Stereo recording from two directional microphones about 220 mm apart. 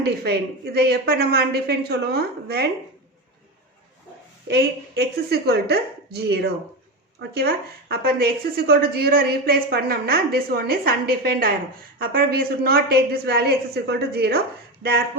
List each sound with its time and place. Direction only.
0.0 s a woman's voice: 45° right (ahead or behind)
4.4 s a woman's voice: 45° right (ahead or behind)